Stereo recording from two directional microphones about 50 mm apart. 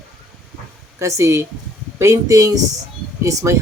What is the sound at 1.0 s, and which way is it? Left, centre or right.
A woman's voice, right.